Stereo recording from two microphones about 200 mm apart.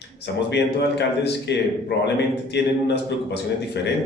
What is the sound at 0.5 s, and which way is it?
A man's voice, 55° left (ahead or behind).